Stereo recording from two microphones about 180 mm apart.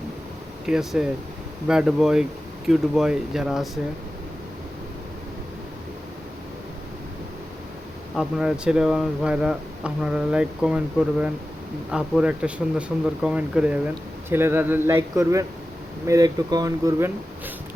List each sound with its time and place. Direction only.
0.6 s speech: 5° right (ahead or behind)
8.1 s speech: 5° right (ahead or behind)